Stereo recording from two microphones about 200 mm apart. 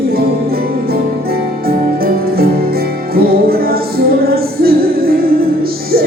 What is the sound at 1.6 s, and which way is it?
Music, 50° right (ahead or behind).